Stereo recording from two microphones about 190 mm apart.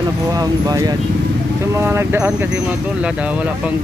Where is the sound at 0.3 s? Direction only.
20° right (ahead or behind).